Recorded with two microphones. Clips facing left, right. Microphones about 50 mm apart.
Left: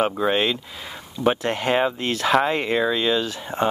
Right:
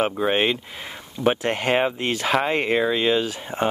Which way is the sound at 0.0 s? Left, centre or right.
Centre.